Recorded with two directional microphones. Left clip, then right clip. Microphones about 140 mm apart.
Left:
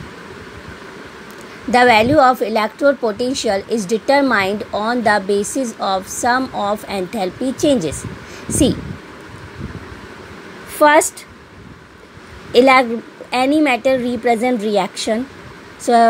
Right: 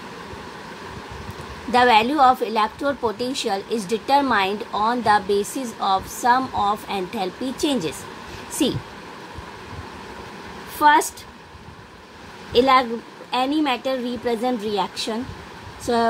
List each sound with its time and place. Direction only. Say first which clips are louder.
1.7 s a woman's voice: left 5 dB; 35° left (ahead or behind)
10.8 s a woman's voice: left 5 dB; 45° left (ahead or behind)
12.5 s speech: left 6 dB; 50° left (ahead or behind)